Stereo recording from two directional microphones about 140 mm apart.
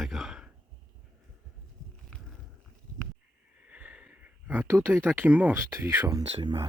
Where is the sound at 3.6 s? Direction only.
10° right (ahead or behind).